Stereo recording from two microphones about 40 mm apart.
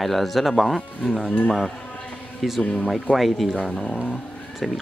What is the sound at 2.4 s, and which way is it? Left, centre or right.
Speech, centre.